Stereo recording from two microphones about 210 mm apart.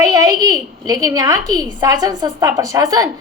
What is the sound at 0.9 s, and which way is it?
A woman's voice, 15° right (ahead or behind).